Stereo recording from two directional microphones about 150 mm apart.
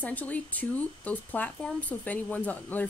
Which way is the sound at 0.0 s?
10° left (ahead or behind).